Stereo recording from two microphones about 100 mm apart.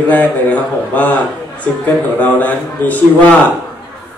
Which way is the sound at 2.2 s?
15° left (ahead or behind).